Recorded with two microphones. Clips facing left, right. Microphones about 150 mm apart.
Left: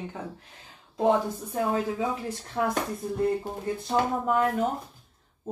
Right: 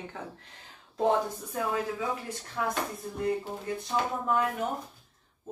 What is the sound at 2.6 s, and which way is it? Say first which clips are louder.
Speech: left 4 dB; 35° left (ahead or behind).